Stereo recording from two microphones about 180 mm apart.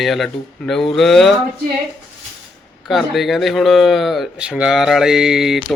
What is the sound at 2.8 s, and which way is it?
Speech, centre (ahead or behind).